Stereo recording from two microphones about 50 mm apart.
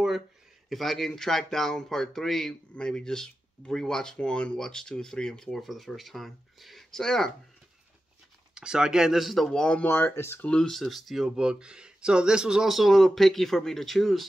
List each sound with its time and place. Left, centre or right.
0.7 s speech: centre
2.7 s speech: centre
8.5 s speech: centre
9.5 s speech: centre
9.8 s speech: left
10.7 s speech: centre
11.2 s speech: centre
12.7 s speech: centre